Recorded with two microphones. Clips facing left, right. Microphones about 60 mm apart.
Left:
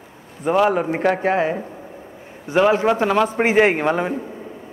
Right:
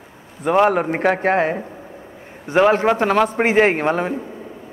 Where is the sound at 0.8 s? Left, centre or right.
Right.